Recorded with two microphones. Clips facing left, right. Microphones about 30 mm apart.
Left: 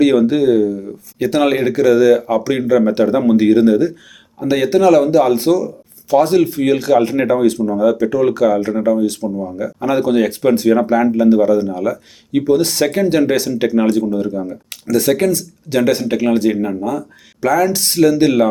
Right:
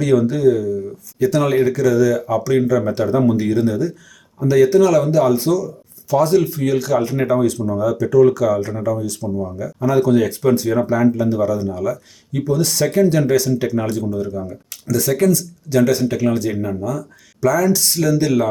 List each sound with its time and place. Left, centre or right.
0.0 s speech: left
9.2 s speech: centre
9.6 s speech: left